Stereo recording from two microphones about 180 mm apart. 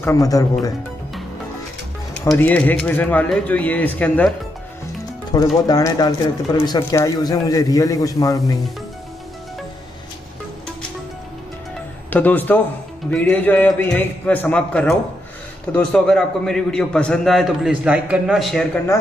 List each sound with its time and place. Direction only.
0.0 s speech: 15° left (ahead or behind)
2.3 s speech: 10° left (ahead or behind)
5.3 s speech: 20° left (ahead or behind)
12.1 s a man's voice: 10° left (ahead or behind)